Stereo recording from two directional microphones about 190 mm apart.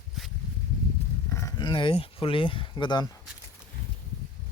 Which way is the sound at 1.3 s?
15° left (ahead or behind).